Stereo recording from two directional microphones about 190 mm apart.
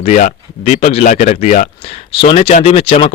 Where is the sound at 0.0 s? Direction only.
40° left (ahead or behind).